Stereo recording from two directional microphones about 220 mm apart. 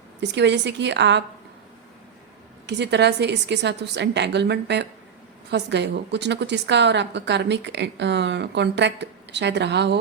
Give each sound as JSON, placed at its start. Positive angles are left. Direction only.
{"t": 0.2, "sound": "a woman's voice", "side_deg": -50}
{"t": 2.6, "sound": "a woman's voice", "side_deg": -50}